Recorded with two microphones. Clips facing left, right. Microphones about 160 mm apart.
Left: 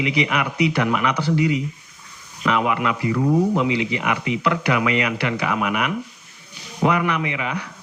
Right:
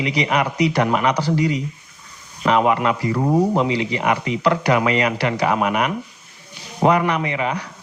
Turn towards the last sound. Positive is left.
turn(degrees=-35)  # may be behind; listen again after turning